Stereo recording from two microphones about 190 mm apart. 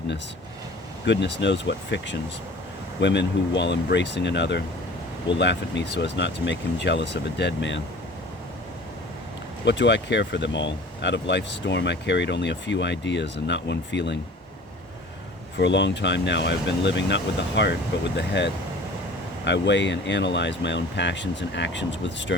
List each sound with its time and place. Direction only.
1.0 s speech: 65° left (ahead or behind)
9.6 s speech: 70° left (ahead or behind)
15.5 s speech: 65° left (ahead or behind)